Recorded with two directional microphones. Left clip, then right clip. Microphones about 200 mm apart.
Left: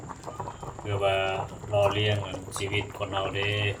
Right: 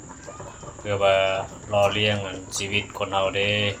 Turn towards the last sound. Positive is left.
turn(degrees=-20)  # may be behind; listen again after turning